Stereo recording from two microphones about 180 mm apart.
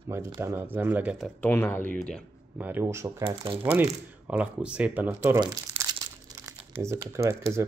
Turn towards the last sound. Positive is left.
turn(degrees=-15)  # may be behind; listen again after turning